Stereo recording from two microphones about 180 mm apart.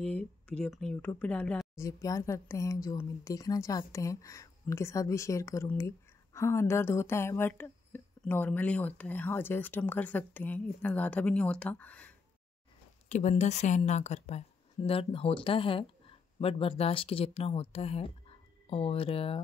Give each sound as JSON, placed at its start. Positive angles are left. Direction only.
{"t": 0.0, "sound": "speech", "side_deg": 5}
{"t": 13.1, "sound": "a woman's voice", "side_deg": 40}